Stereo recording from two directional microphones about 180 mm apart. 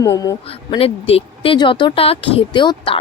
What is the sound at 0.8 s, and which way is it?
Speech, 35° left (ahead or behind).